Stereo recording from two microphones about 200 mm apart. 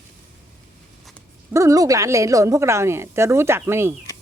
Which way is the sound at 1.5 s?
15° right (ahead or behind).